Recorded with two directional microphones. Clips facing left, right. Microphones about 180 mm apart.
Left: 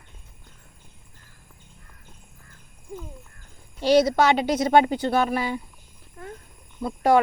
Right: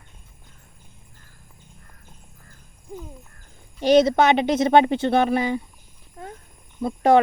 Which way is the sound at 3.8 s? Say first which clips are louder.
Right 2 dB; 25° right (ahead or behind).